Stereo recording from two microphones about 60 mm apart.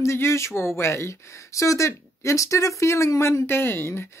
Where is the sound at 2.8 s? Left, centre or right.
Left.